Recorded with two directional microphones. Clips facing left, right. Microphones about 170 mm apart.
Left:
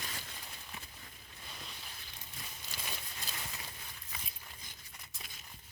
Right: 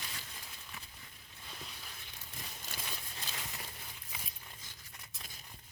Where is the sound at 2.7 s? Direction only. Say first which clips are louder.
Even; 55° right (ahead or behind).